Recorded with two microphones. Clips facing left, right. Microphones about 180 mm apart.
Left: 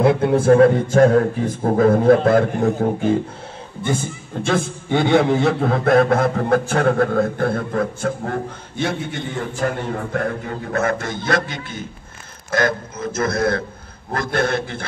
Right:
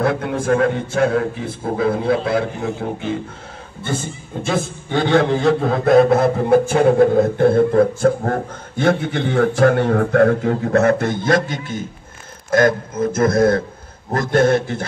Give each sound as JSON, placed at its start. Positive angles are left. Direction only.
{"t": 0.3, "sound": "a man's voice", "side_deg": 35}
{"t": 4.3, "sound": "a man's voice", "side_deg": -5}
{"t": 4.9, "sound": "a man's voice", "side_deg": 5}
{"t": 8.8, "sound": "a man's voice", "side_deg": -70}